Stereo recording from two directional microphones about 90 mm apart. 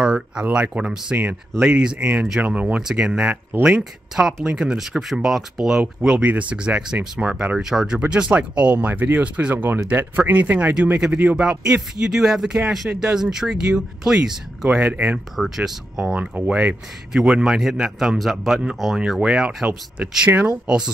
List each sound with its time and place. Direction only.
0.0 s speech: 10° right (ahead or behind)